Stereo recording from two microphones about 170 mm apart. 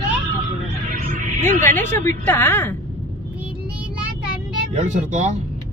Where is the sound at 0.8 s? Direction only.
50° right (ahead or behind).